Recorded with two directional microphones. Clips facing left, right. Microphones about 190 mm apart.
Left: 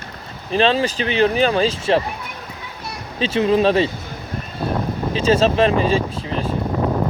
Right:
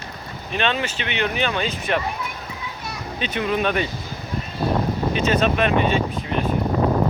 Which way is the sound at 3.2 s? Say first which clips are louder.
Left 7 dB; 30° left (ahead or behind).